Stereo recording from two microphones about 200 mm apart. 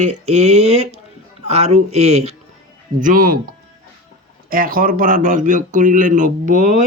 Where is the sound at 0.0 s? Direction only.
35° right (ahead or behind).